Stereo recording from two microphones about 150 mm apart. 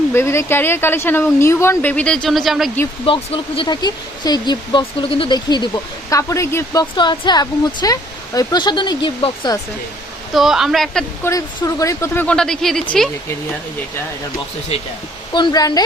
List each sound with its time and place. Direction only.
0.1 s speech: 15° left (ahead or behind); by 2.7 s centre (ahead or behind)
3.1 s speech: 35° left (ahead or behind); by 6.8 s 20° left (ahead or behind)
6.9 s speech: 30° left (ahead or behind)
10.3 s speech: centre (ahead or behind)
11.2 s speech: 20° left (ahead or behind); by 12.8 s 5° left (ahead or behind)
15.3 s speech: 30° left (ahead or behind)